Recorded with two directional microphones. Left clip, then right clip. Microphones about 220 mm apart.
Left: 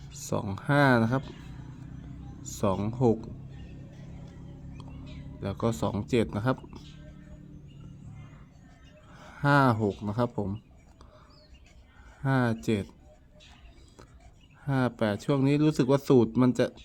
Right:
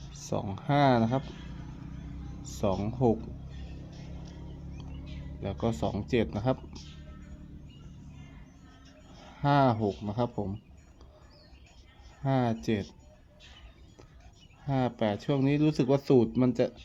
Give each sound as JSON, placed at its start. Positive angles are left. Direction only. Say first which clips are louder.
{"t": 0.1, "sound": "speech", "louder": "left 2 dB", "side_deg": 20}
{"t": 2.4, "sound": "speech", "louder": "left 2 dB", "side_deg": 20}
{"t": 5.4, "sound": "speech", "louder": "left 2 dB", "side_deg": 20}
{"t": 9.3, "sound": "speech", "louder": "left 2 dB", "side_deg": 20}
{"t": 12.2, "sound": "speech", "louder": "left 1 dB", "side_deg": 20}
{"t": 14.7, "sound": "speech", "louder": "left 1 dB", "side_deg": 20}